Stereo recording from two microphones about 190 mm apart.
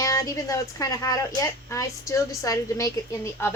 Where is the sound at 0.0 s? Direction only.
15° left (ahead or behind).